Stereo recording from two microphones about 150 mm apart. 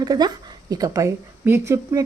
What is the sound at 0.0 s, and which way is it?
Speech, 25° right (ahead or behind).